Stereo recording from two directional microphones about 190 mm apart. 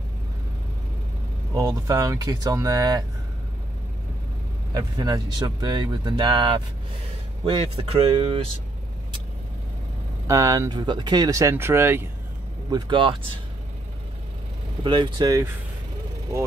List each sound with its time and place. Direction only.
1.5 s speech: 15° right (ahead or behind)
4.7 s speech: 20° right (ahead or behind)
10.2 s speech: 15° right (ahead or behind)
12.7 s speech: 25° right (ahead or behind)
14.8 s speech: 25° right (ahead or behind)